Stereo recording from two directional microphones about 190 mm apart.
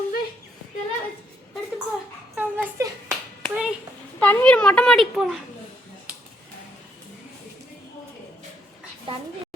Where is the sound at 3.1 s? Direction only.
5° right (ahead or behind).